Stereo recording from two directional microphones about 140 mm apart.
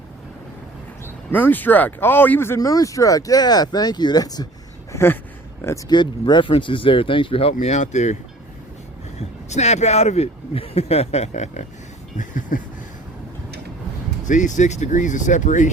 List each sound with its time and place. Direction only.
1.0 s speech: 15° left (ahead or behind); by 4.4 s 30° left (ahead or behind)
4.9 s a sound: 20° left (ahead or behind)
5.9 s speech: 35° left (ahead or behind)
7.6 s speech: 55° left (ahead or behind)
12.1 s a sound: 65° left (ahead or behind)
14.3 s speech: 65° left (ahead or behind)